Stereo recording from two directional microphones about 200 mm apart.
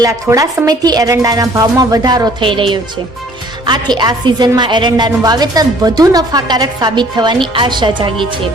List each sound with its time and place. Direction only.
0.0 s a woman's voice: 15° right (ahead or behind)